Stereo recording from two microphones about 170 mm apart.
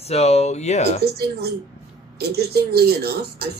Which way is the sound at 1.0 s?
70° right (ahead or behind).